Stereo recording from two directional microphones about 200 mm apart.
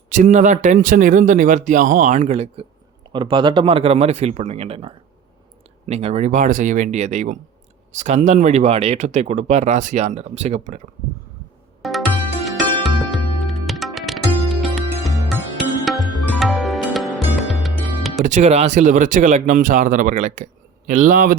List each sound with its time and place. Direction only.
0.1 s speech: 40° right (ahead or behind)
11.8 s music: centre (ahead or behind)
18.3 s speech: 35° right (ahead or behind)